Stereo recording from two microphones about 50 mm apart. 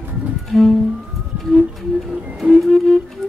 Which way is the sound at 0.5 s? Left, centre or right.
Centre.